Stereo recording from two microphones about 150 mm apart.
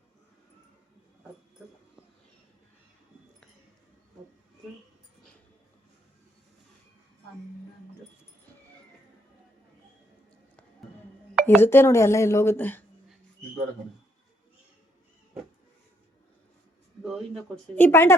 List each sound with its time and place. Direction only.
11.4 s speech: 15° left (ahead or behind)
17.0 s a sound: centre (ahead or behind)
17.7 s speech: 15° left (ahead or behind)